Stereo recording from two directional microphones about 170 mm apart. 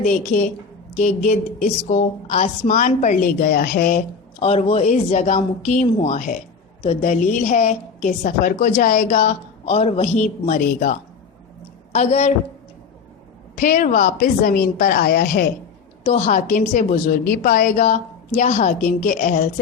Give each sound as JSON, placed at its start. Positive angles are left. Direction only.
{"t": 0.0, "sound": "a woman's voice", "side_deg": 45}
{"t": 4.4, "sound": "a woman's voice", "side_deg": 35}
{"t": 9.6, "sound": "a man's voice", "side_deg": 35}
{"t": 11.9, "sound": "a woman's voice", "side_deg": 40}
{"t": 13.6, "sound": "a woman's voice", "side_deg": 55}
{"t": 16.0, "sound": "a woman's voice", "side_deg": 40}